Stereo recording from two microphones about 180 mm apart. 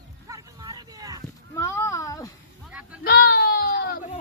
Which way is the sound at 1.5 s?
15° left (ahead or behind).